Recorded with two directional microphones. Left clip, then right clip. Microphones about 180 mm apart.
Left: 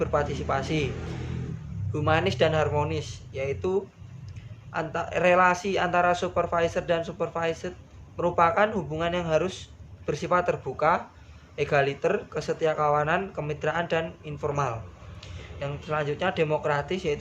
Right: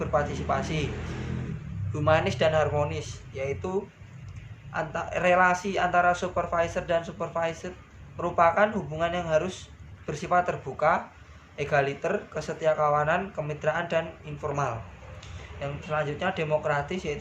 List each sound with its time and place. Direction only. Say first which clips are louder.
0.0 s speech: left 1 dB; 25° left (ahead or behind)
1.9 s speech: right 1 dB; 20° left (ahead or behind)